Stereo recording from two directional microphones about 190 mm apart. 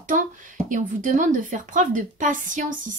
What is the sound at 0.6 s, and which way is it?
Speech, 40° right (ahead or behind).